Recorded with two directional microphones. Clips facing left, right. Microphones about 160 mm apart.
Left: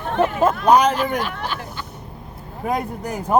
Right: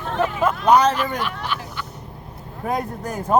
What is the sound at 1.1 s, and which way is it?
Speech, 40° left (ahead or behind).